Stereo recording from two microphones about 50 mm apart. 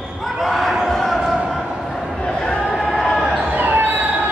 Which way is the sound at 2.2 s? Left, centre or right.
Centre.